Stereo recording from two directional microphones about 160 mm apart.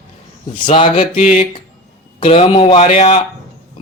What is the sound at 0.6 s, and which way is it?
Speech, 30° left (ahead or behind).